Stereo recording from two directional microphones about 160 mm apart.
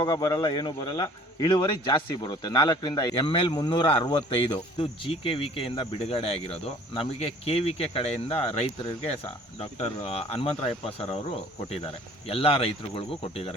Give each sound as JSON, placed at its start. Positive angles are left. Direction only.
{"t": 0.0, "sound": "speech", "side_deg": 25}